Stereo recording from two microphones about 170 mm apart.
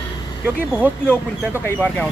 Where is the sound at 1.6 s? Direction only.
10° left (ahead or behind).